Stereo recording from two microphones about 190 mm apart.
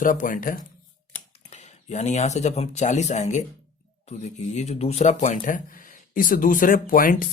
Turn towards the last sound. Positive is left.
turn(degrees=45)  # may be behind; listen again after turning